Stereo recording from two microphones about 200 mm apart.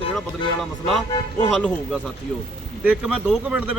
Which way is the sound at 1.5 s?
Centre (ahead or behind).